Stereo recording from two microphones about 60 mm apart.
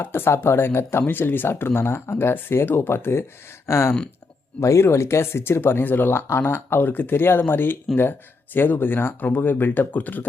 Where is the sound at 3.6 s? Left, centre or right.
Left.